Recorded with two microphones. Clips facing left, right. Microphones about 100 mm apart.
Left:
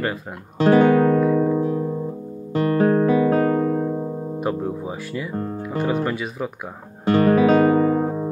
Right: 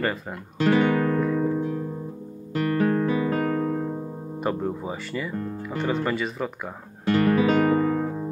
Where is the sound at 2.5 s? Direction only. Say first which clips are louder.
Left 5 dB; 30° left (ahead or behind).